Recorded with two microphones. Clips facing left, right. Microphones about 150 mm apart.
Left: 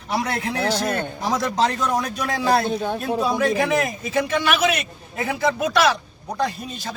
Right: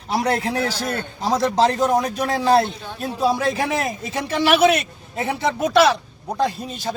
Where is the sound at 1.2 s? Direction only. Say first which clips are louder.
Right 5 dB; 25° right (ahead or behind).